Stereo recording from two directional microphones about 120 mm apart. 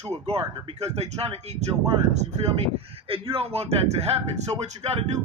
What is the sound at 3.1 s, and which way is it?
A man's voice, 55° right (ahead or behind).